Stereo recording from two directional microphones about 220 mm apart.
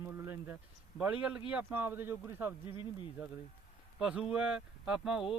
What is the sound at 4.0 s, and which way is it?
Speech, 5° right (ahead or behind).